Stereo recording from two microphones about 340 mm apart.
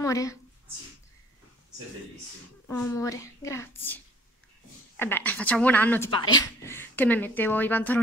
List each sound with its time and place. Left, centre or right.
0.0 s speech: centre
2.7 s speech: centre